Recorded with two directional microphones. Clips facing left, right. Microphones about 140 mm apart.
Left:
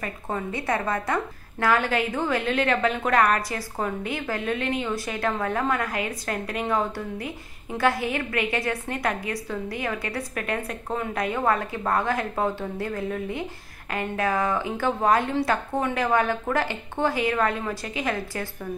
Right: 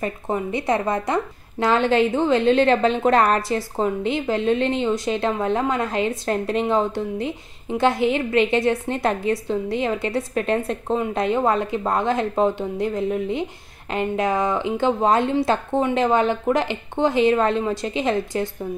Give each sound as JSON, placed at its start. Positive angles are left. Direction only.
{"t": 0.0, "sound": "a woman's voice", "side_deg": -20}